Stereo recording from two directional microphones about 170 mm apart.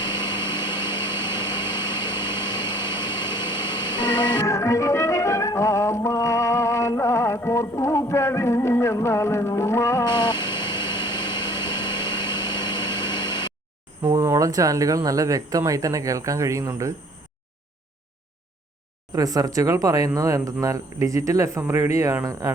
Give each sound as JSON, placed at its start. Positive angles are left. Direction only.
{"t": 0.2, "sound": "a sound", "side_deg": 25}
{"t": 1.4, "sound": "vehicle", "side_deg": 25}
{"t": 2.7, "sound": "a sound", "side_deg": 25}
{"t": 4.0, "sound": "music", "side_deg": 25}
{"t": 14.0, "sound": "speech", "side_deg": -20}
{"t": 19.1, "sound": "speech", "side_deg": -20}